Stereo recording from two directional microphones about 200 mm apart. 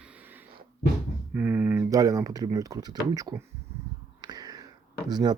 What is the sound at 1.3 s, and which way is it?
Speech, 10° right (ahead or behind).